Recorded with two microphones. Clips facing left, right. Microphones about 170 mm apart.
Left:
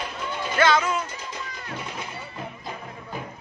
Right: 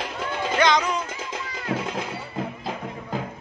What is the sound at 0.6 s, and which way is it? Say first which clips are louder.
Music: even; 15° right (ahead or behind).